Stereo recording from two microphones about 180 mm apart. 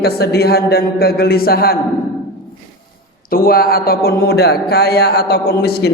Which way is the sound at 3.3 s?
55° left (ahead or behind).